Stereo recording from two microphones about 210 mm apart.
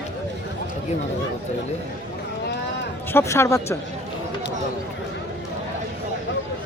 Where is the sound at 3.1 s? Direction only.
15° left (ahead or behind).